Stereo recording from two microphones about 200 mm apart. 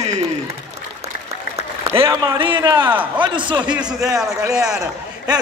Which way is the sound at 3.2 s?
25° right (ahead or behind).